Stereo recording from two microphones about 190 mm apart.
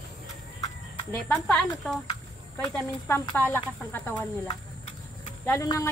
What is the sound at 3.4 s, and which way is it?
Speech, 10° left (ahead or behind).